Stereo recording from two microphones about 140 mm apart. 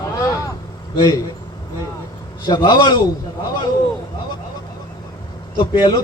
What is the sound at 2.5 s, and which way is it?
Speech, 35° left (ahead or behind).